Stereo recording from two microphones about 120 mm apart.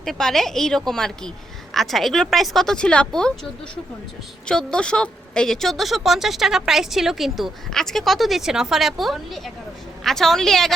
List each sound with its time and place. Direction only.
0.0 s a woman's voice: 5° left (ahead or behind)
4.4 s a woman's voice: 5° left (ahead or behind)